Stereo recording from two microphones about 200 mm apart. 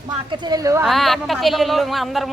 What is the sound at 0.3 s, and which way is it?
Speech, 20° right (ahead or behind).